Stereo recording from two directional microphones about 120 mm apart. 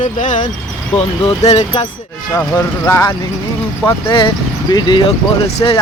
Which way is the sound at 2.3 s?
20° left (ahead or behind).